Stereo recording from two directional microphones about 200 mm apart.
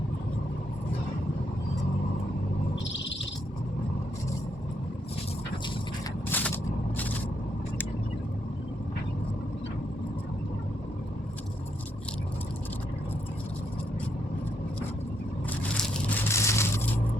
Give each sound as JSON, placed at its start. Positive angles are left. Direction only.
{"t": 2.7, "sound": "owl", "side_deg": 65}
{"t": 6.3, "sound": "crushing", "side_deg": 10}
{"t": 6.9, "sound": "scrape", "side_deg": 10}
{"t": 15.8, "sound": "a sound", "side_deg": 10}